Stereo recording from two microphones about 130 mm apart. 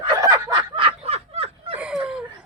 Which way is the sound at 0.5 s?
40° right (ahead or behind).